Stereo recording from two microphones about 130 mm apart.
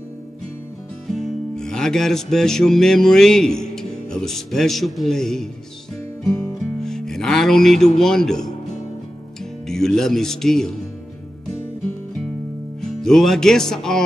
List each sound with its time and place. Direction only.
1.0 s music: 5° left (ahead or behind)
6.2 s music: 25° left (ahead or behind)
6.8 s music: 5° left (ahead or behind)
8.0 s speech: 5° left (ahead or behind)
9.7 s speech: 5° left (ahead or behind)
13.0 s speech: 5° left (ahead or behind)